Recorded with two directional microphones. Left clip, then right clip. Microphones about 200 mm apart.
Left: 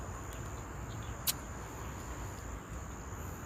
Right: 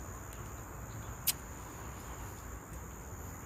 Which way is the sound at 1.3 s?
Centre (ahead or behind).